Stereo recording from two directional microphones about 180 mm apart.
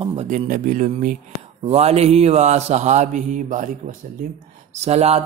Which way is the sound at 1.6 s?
35° right (ahead or behind).